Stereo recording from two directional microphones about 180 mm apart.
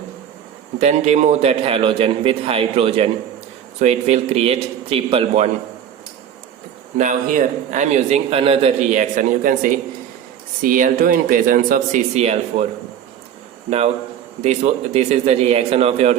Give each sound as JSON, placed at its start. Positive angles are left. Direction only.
{"t": 0.8, "sound": "a man's voice", "side_deg": -35}
{"t": 6.9, "sound": "a man's voice", "side_deg": -45}
{"t": 13.7, "sound": "a man's voice", "side_deg": -35}